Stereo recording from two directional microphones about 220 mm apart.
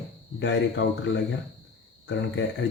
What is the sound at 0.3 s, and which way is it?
Speech, 55° left (ahead or behind).